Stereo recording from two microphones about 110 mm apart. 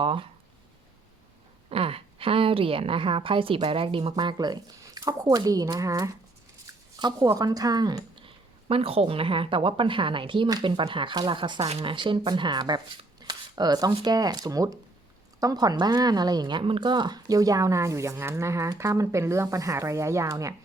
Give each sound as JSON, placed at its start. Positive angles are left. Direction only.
{"t": 0.0, "sound": "speech", "side_deg": -50}
{"t": 1.7, "sound": "a woman's voice", "side_deg": -60}
{"t": 4.1, "sound": "speech", "side_deg": -40}
{"t": 7.3, "sound": "speech", "side_deg": -35}
{"t": 8.2, "sound": "speech", "side_deg": -60}
{"t": 11.6, "sound": "a woman's voice", "side_deg": -65}
{"t": 11.9, "sound": "speech", "side_deg": -50}